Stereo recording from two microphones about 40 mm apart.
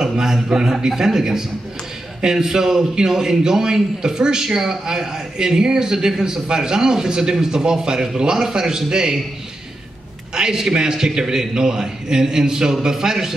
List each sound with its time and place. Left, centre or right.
0.0 s a man's voice: centre
10.3 s a man's voice: centre